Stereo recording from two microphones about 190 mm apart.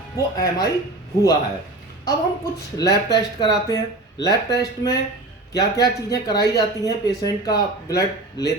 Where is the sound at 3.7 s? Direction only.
20° left (ahead or behind).